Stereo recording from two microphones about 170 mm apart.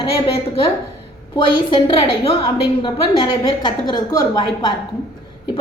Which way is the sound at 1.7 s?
30° left (ahead or behind).